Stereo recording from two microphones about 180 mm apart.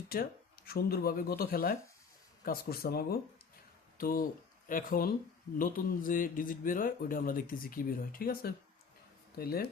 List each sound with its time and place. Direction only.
0.1 s a man's voice: 55° left (ahead or behind)